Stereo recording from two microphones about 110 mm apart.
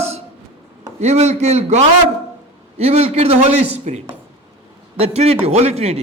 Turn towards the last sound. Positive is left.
turn(degrees=-65)  # may be behind; listen again after turning